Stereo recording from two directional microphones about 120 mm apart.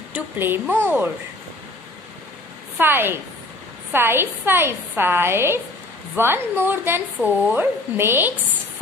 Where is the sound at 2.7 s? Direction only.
15° right (ahead or behind).